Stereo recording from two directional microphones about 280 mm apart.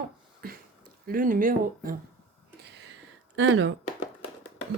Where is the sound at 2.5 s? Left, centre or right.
Right.